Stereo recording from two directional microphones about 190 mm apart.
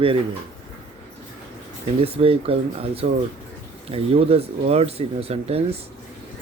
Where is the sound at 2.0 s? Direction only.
30° right (ahead or behind).